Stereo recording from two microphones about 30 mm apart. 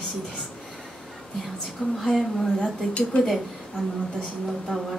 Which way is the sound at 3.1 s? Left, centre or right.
Left.